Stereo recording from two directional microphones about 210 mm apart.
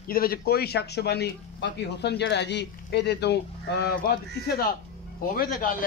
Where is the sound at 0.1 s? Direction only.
45° left (ahead or behind).